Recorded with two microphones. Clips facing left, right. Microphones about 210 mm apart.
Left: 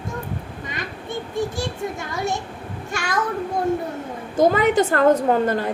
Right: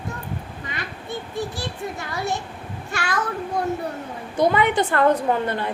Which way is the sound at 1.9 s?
20° left (ahead or behind).